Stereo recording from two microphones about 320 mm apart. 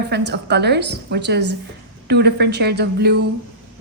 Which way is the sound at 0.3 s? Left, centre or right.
Right.